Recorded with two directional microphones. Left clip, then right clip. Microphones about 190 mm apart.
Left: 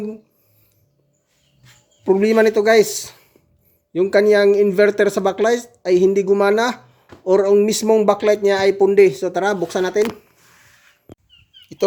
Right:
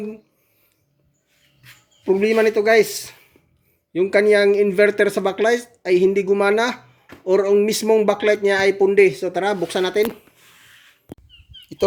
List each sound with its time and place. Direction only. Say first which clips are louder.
2.0 s a man's voice: left 2 dB; 20° left (ahead or behind)
11.8 s bird: left 1 dB; 5° right (ahead or behind)